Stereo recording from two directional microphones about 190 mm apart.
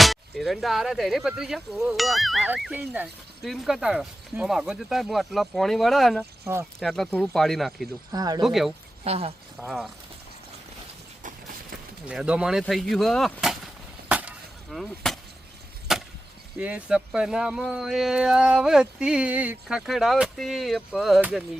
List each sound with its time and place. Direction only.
0.0 s speech: centre (ahead or behind)
6.4 s speech: 15° right (ahead or behind)
6.7 s speech: centre (ahead or behind)
8.1 s speech: 20° right (ahead or behind)
8.4 s speech: centre (ahead or behind)
9.0 s speech: 30° right (ahead or behind)
9.6 s speech: centre (ahead or behind)
11.2 s a sound: 45° right (ahead or behind)
12.0 s speech: 5° right (ahead or behind)
14.1 s a sound: 5° right (ahead or behind)
15.9 s wood: centre (ahead or behind)
16.6 s speech: 5° right (ahead or behind)